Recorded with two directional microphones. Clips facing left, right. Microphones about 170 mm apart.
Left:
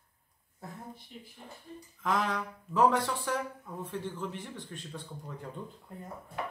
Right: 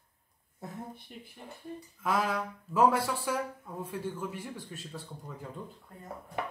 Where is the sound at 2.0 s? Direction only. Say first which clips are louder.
Right 1 dB; 5° right (ahead or behind).